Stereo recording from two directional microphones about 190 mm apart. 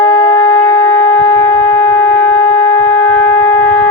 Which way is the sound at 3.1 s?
10° left (ahead or behind).